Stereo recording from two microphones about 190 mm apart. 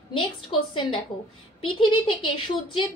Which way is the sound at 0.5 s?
25° left (ahead or behind).